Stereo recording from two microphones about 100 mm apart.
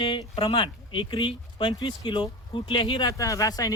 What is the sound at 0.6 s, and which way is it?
Speech, 55° left (ahead or behind).